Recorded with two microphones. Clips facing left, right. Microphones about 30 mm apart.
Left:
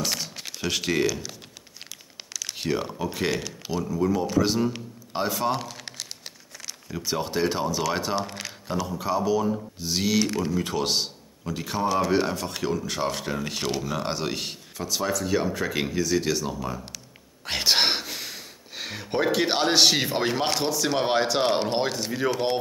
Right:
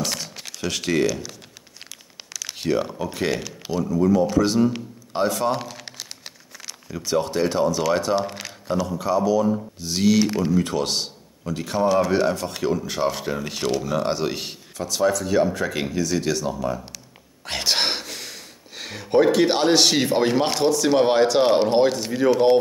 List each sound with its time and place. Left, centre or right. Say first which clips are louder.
0.0 s a sound: right 1 dB; centre
0.5 s a man's voice: right 2 dB; centre
2.3 s a man's voice: right 4 dB; centre
8.2 s a man's voice: right 4 dB; centre
10.2 s speech: right 5 dB; centre
10.6 s a man's voice: right 2 dB; centre